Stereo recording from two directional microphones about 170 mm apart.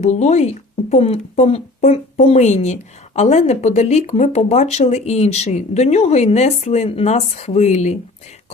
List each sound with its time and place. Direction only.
0.0 s speech: 40° left (ahead or behind)